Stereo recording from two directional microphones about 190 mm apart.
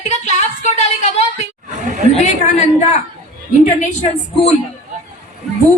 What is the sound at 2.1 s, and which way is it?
Speech, 35° left (ahead or behind).